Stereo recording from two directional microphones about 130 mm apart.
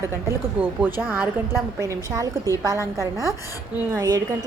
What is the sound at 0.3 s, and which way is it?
Speech, 15° right (ahead or behind).